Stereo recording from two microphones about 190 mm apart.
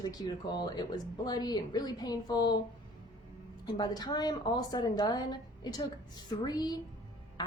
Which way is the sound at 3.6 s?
20° left (ahead or behind).